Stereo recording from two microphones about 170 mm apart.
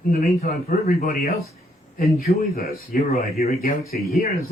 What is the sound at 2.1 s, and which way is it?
Speech, 60° left (ahead or behind).